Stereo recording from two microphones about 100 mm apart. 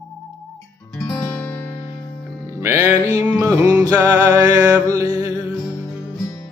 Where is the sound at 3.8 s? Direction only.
35° right (ahead or behind).